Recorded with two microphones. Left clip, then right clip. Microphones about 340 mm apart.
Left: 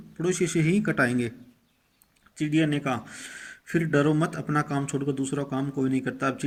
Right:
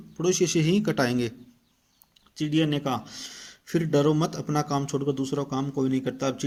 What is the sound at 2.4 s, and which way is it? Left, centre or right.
Speech, centre.